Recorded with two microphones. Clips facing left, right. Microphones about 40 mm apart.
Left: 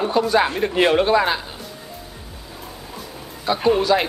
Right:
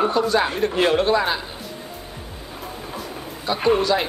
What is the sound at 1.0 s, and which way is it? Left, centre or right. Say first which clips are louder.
Speech: left 2 dB; centre.